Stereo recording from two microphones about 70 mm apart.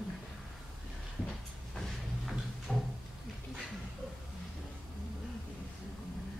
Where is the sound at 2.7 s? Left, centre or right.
Centre.